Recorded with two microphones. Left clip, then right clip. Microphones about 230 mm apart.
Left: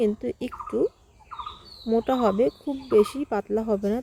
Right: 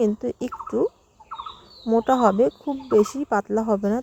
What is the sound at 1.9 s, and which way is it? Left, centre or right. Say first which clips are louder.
Speech: right 4 dB; centre.